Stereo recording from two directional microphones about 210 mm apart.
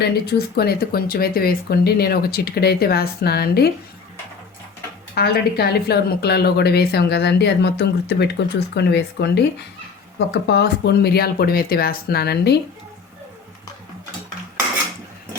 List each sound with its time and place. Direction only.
0.0 s speech: 50° left (ahead or behind)
5.1 s speech: 50° left (ahead or behind)